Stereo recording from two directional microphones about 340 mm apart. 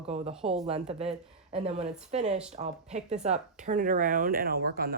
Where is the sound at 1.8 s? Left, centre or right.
Centre.